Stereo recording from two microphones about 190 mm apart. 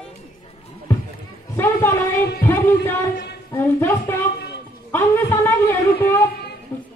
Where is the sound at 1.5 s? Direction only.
10° left (ahead or behind).